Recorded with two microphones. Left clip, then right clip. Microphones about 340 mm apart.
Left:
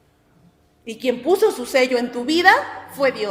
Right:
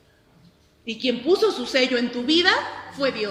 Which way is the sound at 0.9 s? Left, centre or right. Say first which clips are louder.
Left 2 dB; left.